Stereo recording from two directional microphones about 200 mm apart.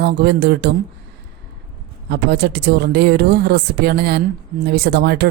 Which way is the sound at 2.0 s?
55° right (ahead or behind).